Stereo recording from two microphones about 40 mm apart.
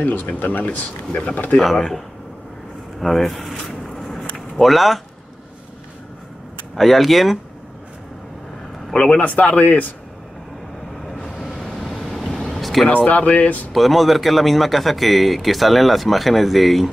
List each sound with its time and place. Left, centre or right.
0.0 s speech: left
0.7 s speech: left
1.3 s speech: left
3.0 s a sound: centre
4.6 s a man's voice: centre
6.7 s a man's voice: centre
9.2 s speech: left
11.4 s vehicle: centre
12.3 s vehicle: centre
12.9 s speech: left
13.7 s a man's voice: centre